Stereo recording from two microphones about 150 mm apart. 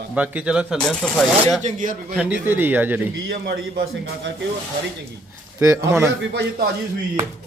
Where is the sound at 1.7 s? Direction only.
65° right (ahead or behind).